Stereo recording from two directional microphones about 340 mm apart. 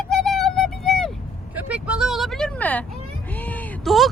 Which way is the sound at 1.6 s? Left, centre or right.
Centre.